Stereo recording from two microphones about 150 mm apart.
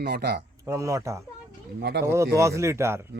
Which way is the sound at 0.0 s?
90° right.